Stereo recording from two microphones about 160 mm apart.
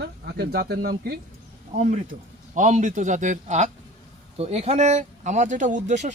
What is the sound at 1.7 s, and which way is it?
Speech, 50° right (ahead or behind).